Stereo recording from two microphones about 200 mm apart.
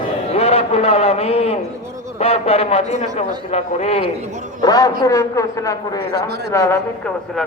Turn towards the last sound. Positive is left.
turn(degrees=15)  # may be behind; listen again after turning